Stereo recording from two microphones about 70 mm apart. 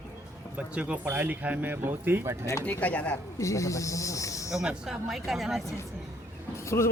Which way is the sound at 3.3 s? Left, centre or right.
Left.